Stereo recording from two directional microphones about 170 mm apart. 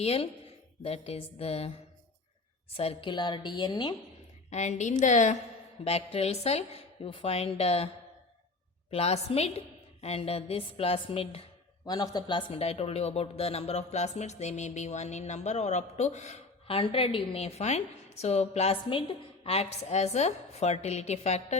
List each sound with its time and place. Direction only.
0.0 s speech: 35° left (ahead or behind)
2.7 s a woman's voice: 35° left (ahead or behind)
4.4 s a woman's voice: 40° left (ahead or behind)
8.9 s speech: 35° left (ahead or behind)
11.9 s a woman's voice: 25° left (ahead or behind)
12.5 s speech: 35° left (ahead or behind)